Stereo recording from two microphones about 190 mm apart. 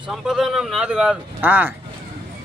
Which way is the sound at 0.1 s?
Centre (ahead or behind).